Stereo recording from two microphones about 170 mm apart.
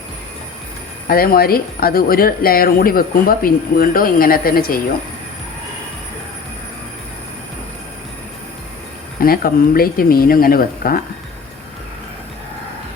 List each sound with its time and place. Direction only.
1.0 s speech: 60° left (ahead or behind)
9.2 s speech: 60° left (ahead or behind)